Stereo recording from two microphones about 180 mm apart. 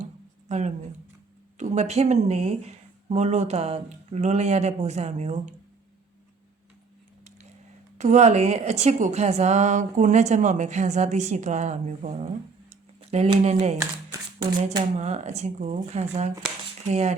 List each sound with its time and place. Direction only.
0.0 s a sound: 40° right (ahead or behind)
1.5 s a woman's voice: 40° right (ahead or behind)
7.9 s a woman's voice: 40° right (ahead or behind)
14.9 s a woman's voice: 40° right (ahead or behind)